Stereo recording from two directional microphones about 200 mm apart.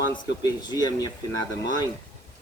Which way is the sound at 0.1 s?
20° left (ahead or behind).